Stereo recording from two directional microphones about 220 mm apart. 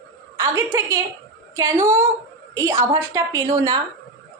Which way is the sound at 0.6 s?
10° right (ahead or behind).